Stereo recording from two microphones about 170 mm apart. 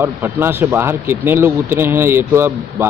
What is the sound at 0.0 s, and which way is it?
Speech, 15° right (ahead or behind).